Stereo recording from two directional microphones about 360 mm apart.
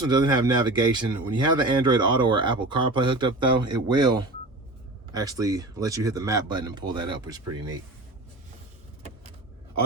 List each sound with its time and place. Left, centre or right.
0.1 s speech: centre